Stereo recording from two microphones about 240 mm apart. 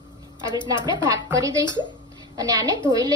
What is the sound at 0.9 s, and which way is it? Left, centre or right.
Speech, centre.